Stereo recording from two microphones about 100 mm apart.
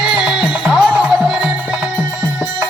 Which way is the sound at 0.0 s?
5° right (ahead or behind).